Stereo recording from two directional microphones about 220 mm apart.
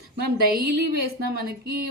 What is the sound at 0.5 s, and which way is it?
Speech, 45° right (ahead or behind).